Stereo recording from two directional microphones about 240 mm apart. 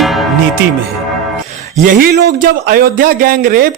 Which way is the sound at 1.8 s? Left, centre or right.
Right.